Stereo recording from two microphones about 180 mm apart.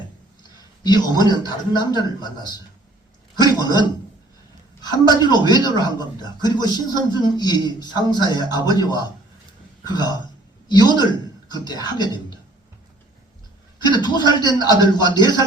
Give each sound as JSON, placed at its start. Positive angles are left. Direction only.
{"t": 0.9, "sound": "speech", "side_deg": 25}
{"t": 3.4, "sound": "a sound", "side_deg": 20}
{"t": 4.8, "sound": "speech", "side_deg": 25}
{"t": 13.7, "sound": "a man's voice", "side_deg": 25}